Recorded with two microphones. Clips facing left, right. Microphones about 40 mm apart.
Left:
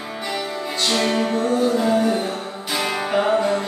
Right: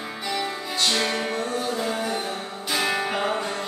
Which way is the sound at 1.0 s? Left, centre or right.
Centre.